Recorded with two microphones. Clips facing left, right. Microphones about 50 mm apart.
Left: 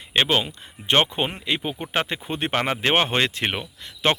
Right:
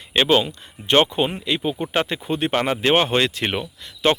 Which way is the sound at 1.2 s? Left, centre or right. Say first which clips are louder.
Right 3 dB; left.